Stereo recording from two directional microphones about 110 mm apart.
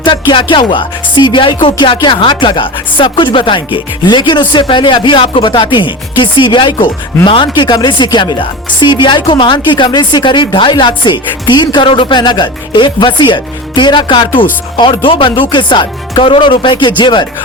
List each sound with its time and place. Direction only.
0.0 s speech: 45° left (ahead or behind)